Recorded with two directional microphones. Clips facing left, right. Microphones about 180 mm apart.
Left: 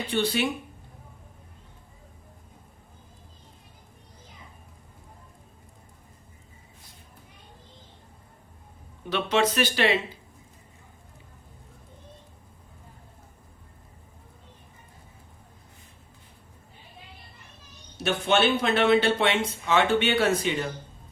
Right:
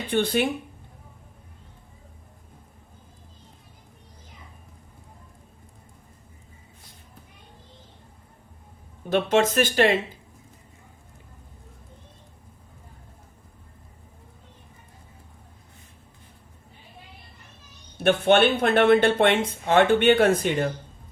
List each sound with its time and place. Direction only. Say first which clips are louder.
0.1 s speech: right 4 dB; 55° right (ahead or behind)
9.0 s speech: right 4 dB; 45° right (ahead or behind)
17.9 s speech: right 5 dB; 55° right (ahead or behind)